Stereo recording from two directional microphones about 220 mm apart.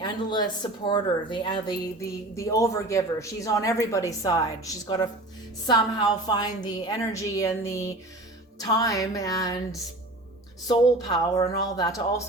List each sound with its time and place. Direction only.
0.0 s speech: 20° left (ahead or behind)
10.7 s speech: 20° left (ahead or behind)